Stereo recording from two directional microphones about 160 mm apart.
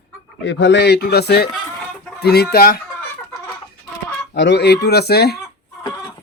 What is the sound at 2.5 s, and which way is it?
Speech, 70° left (ahead or behind).